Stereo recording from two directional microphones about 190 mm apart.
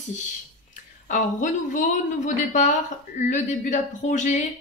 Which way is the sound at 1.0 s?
40° left (ahead or behind).